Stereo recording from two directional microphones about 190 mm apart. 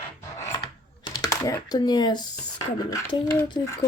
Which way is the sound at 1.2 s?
20° left (ahead or behind).